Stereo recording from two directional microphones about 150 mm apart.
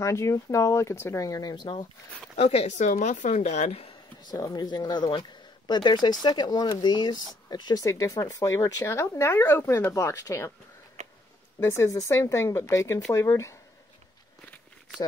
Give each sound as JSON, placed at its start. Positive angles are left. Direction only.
{"t": 0.0, "sound": "speech", "side_deg": 20}
{"t": 2.3, "sound": "speech", "side_deg": 45}
{"t": 4.2, "sound": "speech", "side_deg": 25}
{"t": 11.0, "sound": "a sound", "side_deg": -50}
{"t": 11.6, "sound": "speech", "side_deg": 20}